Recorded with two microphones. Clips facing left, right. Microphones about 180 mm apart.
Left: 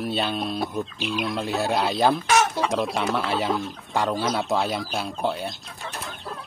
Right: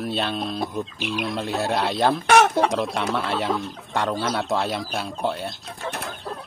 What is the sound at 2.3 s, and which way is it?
Chicken, 60° right (ahead or behind).